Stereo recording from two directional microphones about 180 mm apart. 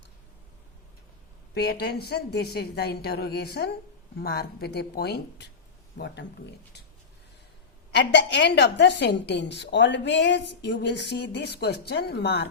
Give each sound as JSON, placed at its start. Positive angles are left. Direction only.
{"t": 1.5, "sound": "a woman's voice", "side_deg": 60}
{"t": 7.9, "sound": "a woman's voice", "side_deg": 75}